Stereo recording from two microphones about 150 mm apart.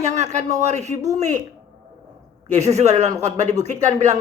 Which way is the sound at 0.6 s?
50° right (ahead or behind).